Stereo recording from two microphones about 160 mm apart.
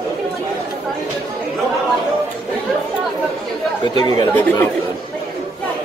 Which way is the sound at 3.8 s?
30° left (ahead or behind).